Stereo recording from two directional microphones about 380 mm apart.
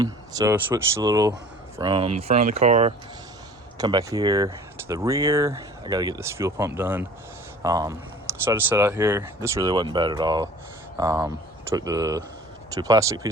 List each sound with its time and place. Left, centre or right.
0.0 s speech: centre